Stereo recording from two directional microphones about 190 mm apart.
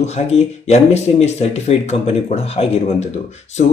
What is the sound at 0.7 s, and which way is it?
A man's voice, 35° left (ahead or behind).